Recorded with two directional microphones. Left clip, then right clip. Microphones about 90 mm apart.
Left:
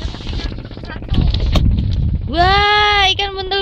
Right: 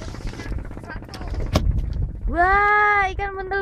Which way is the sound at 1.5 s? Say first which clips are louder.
Left 4 dB; 25° right (ahead or behind).